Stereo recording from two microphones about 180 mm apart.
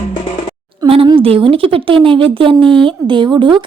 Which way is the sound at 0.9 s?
30° right (ahead or behind).